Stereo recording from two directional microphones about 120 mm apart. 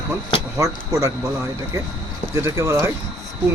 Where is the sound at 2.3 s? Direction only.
25° right (ahead or behind).